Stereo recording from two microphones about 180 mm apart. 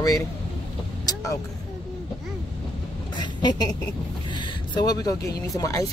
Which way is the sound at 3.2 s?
25° left (ahead or behind).